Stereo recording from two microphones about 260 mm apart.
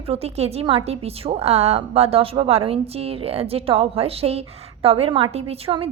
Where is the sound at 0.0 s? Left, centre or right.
Right.